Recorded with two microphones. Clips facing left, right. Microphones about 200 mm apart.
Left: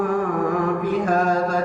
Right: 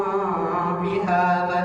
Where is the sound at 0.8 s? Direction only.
50° left (ahead or behind).